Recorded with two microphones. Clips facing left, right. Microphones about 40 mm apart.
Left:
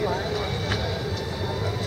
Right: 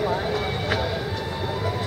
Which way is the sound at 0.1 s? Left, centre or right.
Centre.